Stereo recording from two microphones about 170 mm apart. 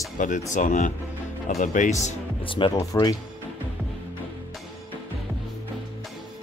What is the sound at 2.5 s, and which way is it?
Speech, 25° left (ahead or behind).